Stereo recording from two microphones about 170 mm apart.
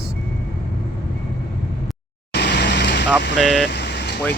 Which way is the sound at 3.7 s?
90° left.